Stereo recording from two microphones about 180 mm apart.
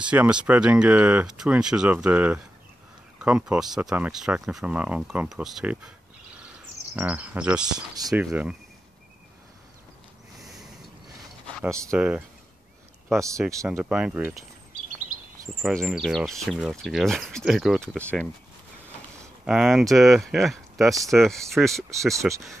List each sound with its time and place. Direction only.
0.0 s speech: 5° right (ahead or behind)
7.0 s speech: 10° right (ahead or behind)
7.9 s speech: 20° right (ahead or behind)
8.2 s speech: 5° right (ahead or behind)
11.9 s speech: 5° right (ahead or behind)
13.2 s speech: 15° right (ahead or behind)
13.7 s speech: 5° right (ahead or behind)
15.6 s speech: centre (ahead or behind)
19.4 s speech: 5° right (ahead or behind)